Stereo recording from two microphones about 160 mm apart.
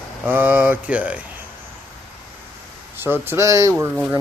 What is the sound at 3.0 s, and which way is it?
Speech, 15° right (ahead or behind).